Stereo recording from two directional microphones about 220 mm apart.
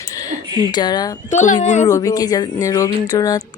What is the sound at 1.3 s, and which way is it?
Speech, 35° left (ahead or behind).